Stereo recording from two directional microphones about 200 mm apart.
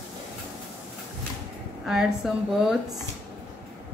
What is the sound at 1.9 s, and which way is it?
Speech, centre (ahead or behind).